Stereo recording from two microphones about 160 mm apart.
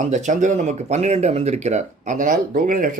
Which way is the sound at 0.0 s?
45° right (ahead or behind).